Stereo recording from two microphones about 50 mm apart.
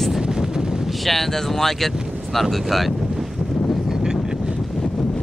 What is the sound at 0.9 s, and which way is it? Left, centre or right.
Speech, centre.